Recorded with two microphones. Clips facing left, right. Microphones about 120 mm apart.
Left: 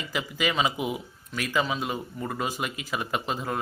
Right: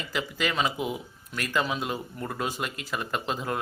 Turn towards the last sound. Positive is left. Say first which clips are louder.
# even
turn(degrees=0)  # may be behind; listen again after turning